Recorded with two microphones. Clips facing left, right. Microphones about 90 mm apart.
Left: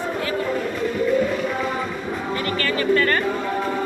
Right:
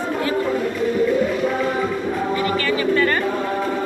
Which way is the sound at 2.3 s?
10° right (ahead or behind).